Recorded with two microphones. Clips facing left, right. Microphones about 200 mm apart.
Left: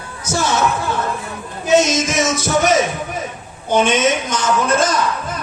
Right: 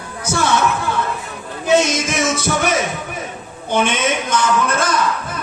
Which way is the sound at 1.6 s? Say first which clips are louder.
Left 1 dB; 55° right (ahead or behind).